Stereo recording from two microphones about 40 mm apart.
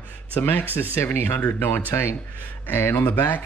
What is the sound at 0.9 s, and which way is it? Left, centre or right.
Speech, left.